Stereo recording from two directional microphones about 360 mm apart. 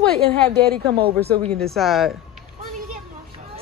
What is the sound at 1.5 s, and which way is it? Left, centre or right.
Speech, centre.